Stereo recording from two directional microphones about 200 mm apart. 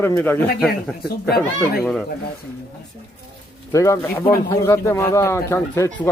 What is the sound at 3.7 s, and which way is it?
Speech, 15° left (ahead or behind).